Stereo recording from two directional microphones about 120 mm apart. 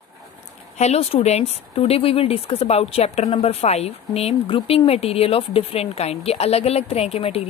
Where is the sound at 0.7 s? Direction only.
60° left (ahead or behind).